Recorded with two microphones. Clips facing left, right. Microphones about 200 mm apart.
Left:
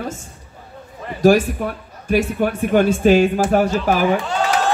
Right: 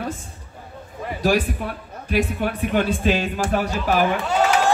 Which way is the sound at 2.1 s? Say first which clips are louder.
Left 4 dB; 45° left (ahead or behind).